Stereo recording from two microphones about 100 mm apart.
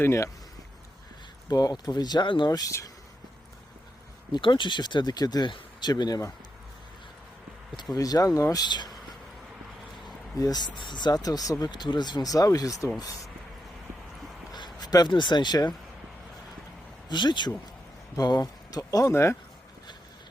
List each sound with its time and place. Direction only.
0.0 s speech: 25° left (ahead or behind)
1.5 s speech: 40° left (ahead or behind)
2.5 s speech: 35° left (ahead or behind)
4.3 s speech: 55° left (ahead or behind); by 6.3 s 35° left (ahead or behind)
7.9 s speech: 40° left (ahead or behind)
10.3 s speech: 40° left (ahead or behind)
14.5 s speech: 45° left (ahead or behind)
17.1 s speech: 50° left (ahead or behind)
18.2 s speech: 40° left (ahead or behind)